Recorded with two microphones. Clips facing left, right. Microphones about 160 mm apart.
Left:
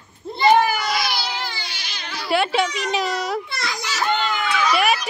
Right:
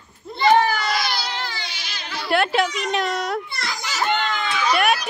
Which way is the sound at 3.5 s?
75° left (ahead or behind).